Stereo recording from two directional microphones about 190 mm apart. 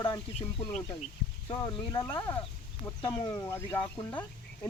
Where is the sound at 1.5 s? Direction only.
20° left (ahead or behind).